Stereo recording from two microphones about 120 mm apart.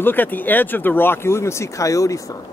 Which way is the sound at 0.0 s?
15° left (ahead or behind).